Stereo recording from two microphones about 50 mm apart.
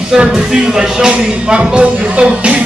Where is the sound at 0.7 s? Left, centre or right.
Centre.